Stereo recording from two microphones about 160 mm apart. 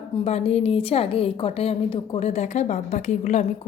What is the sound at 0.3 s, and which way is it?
Speech, 40° left (ahead or behind).